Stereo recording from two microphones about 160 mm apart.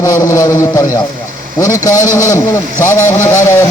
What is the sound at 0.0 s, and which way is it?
Speech, 20° left (ahead or behind).